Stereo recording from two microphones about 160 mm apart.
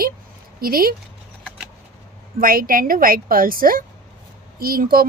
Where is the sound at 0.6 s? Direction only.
65° right (ahead or behind).